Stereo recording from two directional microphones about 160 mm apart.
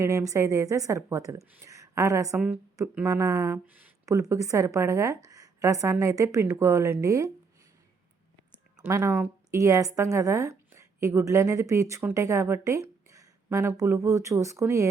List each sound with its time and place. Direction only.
0.0 s a woman's voice: 20° right (ahead or behind)
8.8 s speech: 15° right (ahead or behind)